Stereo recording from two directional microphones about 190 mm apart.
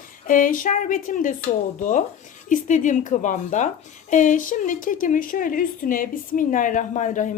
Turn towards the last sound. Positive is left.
turn(degrees=40)  # may be behind; listen again after turning